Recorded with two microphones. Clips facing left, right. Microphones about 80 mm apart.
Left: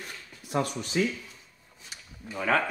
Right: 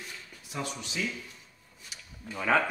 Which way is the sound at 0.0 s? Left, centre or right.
Left.